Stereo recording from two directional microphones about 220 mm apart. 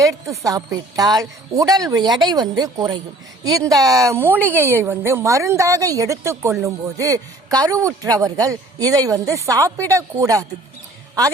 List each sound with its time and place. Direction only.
0.0 s a man's voice: 15° right (ahead or behind)